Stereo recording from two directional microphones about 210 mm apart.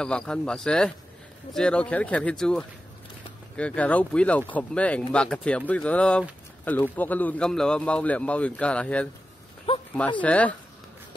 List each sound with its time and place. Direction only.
0.0 s a man's voice: 5° left (ahead or behind)
9.7 s a sound: 25° left (ahead or behind)
10.2 s speech: 5° left (ahead or behind)